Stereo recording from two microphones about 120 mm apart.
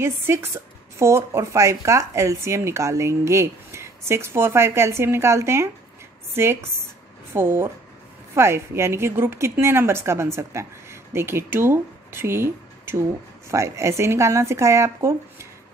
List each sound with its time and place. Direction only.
0.0 s speech: 20° right (ahead or behind)